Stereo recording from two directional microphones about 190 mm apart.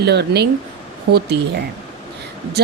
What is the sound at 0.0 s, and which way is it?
Speech, 60° right (ahead or behind).